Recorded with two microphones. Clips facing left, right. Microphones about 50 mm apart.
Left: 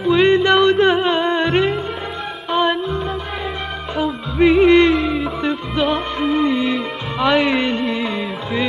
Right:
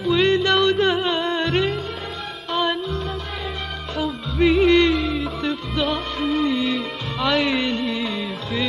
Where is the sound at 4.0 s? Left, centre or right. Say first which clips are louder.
Left 4 dB; centre.